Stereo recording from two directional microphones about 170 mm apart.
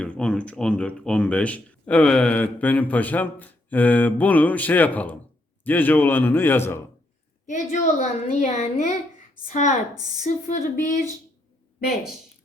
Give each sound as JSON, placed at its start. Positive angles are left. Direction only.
{"t": 0.0, "sound": "speech", "side_deg": 5}
{"t": 7.4, "sound": "a child's voice", "side_deg": 45}